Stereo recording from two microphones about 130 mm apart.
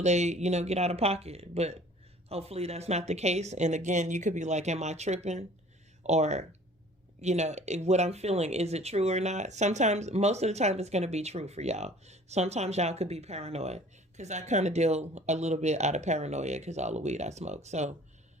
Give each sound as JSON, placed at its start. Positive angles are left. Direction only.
{"t": 0.0, "sound": "speech", "side_deg": -60}